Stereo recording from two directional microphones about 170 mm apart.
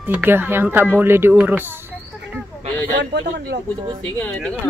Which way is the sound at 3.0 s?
80° right.